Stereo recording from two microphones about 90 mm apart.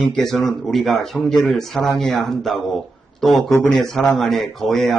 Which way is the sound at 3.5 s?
30° left (ahead or behind).